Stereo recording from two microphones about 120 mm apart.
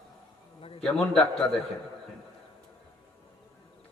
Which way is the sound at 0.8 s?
5° left (ahead or behind).